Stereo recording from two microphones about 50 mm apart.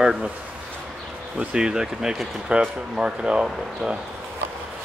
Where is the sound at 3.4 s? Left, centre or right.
Centre.